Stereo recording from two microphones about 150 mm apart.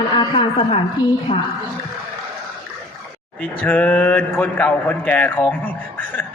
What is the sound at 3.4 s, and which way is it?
A man's voice, 10° left (ahead or behind).